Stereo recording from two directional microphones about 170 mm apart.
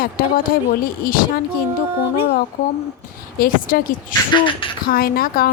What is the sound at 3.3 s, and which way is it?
Speech, 55° left (ahead or behind).